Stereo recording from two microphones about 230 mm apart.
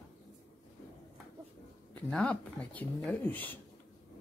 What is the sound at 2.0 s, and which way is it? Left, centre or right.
Speech, centre.